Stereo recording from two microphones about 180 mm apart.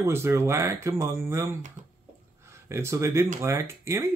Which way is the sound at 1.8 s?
45° right (ahead or behind).